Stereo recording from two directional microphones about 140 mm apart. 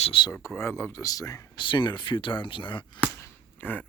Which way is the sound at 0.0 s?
40° left (ahead or behind).